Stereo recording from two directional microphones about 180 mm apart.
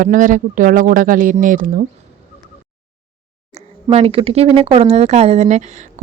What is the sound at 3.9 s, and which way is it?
Speech, 35° right (ahead or behind).